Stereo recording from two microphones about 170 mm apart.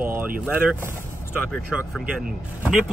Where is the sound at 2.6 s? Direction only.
5° right (ahead or behind).